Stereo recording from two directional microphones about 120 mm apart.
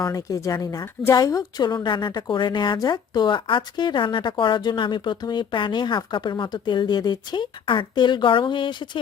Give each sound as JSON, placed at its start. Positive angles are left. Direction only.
{"t": 0.0, "sound": "a woman's voice", "side_deg": 30}